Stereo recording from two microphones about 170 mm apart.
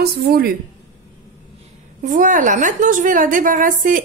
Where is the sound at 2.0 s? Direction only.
50° right (ahead or behind).